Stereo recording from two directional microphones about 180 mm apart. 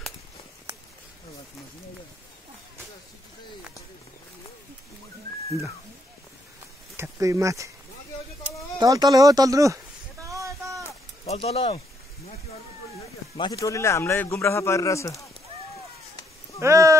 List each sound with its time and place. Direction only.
7.0 s speech: 15° right (ahead or behind)
8.7 s speech: 20° right (ahead or behind)
10.2 s a sound: 15° right (ahead or behind)
11.2 s speech: 35° left (ahead or behind)
13.4 s speech: 20° left (ahead or behind)
16.5 s speech: 15° right (ahead or behind)